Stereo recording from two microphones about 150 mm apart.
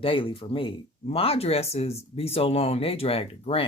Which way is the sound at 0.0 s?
35° left (ahead or behind).